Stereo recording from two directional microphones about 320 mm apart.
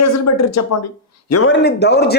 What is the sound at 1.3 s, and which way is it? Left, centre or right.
Speech, left.